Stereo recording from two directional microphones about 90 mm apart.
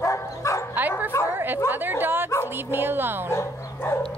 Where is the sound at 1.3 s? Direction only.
20° right (ahead or behind).